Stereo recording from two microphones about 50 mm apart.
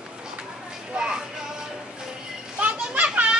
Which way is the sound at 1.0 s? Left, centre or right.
Centre.